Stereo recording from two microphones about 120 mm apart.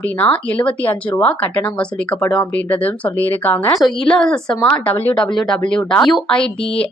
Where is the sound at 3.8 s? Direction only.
5° left (ahead or behind).